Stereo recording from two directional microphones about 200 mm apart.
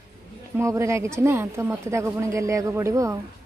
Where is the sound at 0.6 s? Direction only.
15° right (ahead or behind).